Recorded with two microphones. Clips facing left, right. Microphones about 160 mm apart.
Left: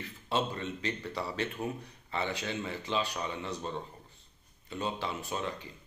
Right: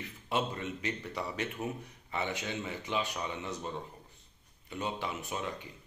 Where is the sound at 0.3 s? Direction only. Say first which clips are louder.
Left 1 dB; 15° right (ahead or behind).